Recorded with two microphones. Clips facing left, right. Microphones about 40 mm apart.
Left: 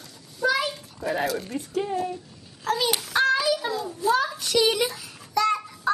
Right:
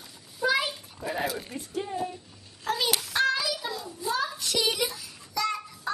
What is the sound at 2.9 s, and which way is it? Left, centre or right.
Child singing, centre.